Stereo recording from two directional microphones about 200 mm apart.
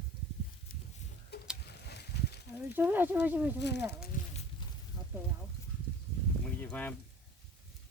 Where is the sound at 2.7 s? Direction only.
10° right (ahead or behind).